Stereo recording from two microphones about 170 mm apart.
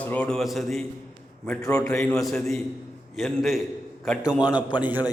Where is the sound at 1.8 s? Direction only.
5° left (ahead or behind).